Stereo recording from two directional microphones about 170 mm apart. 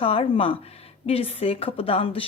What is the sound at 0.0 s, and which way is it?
Speech, 35° left (ahead or behind).